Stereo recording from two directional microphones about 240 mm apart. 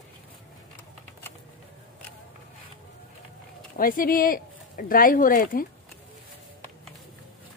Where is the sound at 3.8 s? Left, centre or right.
Left.